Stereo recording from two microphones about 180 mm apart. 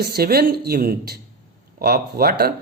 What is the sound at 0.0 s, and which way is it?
Speech, 60° right (ahead or behind).